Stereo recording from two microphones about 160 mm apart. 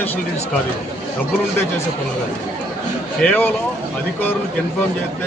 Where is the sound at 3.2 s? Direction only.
15° left (ahead or behind).